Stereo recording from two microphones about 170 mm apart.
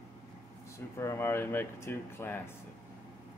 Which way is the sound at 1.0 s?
15° left (ahead or behind).